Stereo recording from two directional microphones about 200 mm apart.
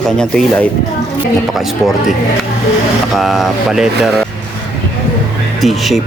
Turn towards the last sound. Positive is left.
turn(degrees=0)  # may be behind; listen again after turning